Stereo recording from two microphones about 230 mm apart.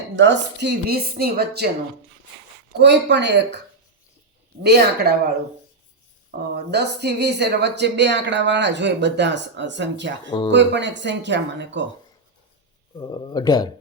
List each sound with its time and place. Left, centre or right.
0.2 s speech: right
2.7 s speech: right
4.6 s speech: right
6.3 s speech: right
13.0 s speech: centre